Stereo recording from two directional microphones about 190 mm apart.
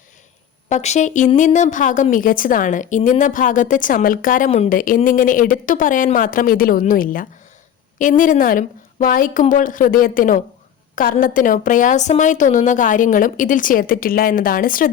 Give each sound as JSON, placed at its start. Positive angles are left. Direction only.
{"t": 0.7, "sound": "a woman's voice", "side_deg": 35}